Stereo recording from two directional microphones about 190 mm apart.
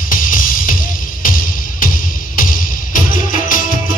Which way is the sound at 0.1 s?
45° left (ahead or behind).